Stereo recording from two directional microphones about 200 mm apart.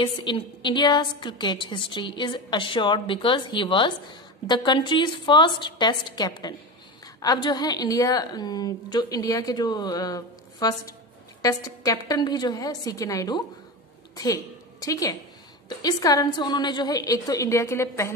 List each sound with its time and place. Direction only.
0.0 s a woman's voice: 25° left (ahead or behind)